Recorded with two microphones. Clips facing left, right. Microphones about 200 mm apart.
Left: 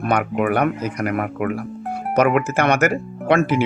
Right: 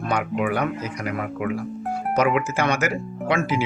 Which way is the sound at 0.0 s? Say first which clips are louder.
Left 4 dB; 60° left (ahead or behind).